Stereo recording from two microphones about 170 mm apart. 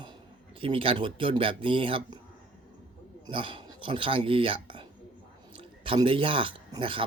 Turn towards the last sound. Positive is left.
turn(degrees=-30)  # may be behind; listen again after turning